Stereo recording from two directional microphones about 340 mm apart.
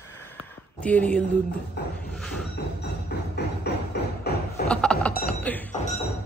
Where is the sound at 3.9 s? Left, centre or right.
Left.